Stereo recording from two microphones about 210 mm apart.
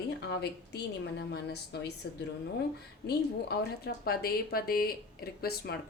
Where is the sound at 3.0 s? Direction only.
50° left (ahead or behind).